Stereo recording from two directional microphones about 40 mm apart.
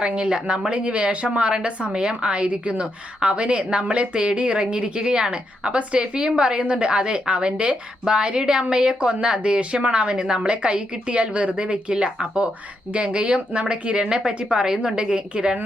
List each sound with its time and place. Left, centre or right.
0.0 s a woman's voice: right